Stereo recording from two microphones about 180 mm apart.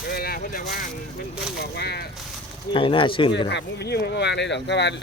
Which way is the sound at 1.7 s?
65° left (ahead or behind).